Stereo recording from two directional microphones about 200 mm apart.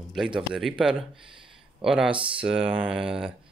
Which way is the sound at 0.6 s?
5° right (ahead or behind).